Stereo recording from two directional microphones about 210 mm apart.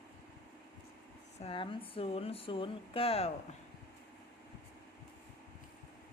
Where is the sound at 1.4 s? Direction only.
25° left (ahead or behind).